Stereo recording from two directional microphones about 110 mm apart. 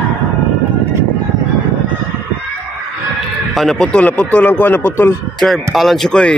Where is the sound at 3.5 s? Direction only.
5° left (ahead or behind); by 5.1 s 20° left (ahead or behind).